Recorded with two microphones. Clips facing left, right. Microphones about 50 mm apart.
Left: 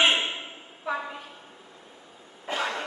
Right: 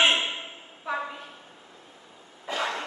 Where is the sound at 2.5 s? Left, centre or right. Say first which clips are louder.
Left 1 dB; left.